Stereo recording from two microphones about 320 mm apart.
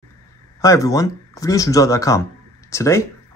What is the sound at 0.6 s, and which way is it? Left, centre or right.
Speech, centre.